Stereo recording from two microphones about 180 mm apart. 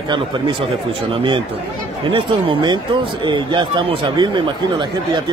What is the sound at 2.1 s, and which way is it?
A man's voice, 25° right (ahead or behind).